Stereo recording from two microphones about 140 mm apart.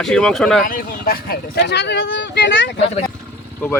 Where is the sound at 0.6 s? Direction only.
90° left.